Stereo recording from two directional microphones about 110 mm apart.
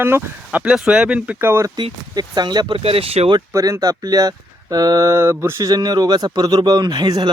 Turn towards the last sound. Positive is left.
turn(degrees=-40)  # may be behind; listen again after turning